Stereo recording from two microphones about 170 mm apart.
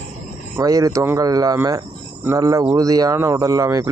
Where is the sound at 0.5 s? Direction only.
20° right (ahead or behind).